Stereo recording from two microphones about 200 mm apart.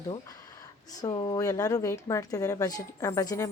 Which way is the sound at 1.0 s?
20° left (ahead or behind).